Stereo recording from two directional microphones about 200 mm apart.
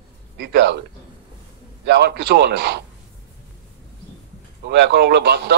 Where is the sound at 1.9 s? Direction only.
55° right (ahead or behind).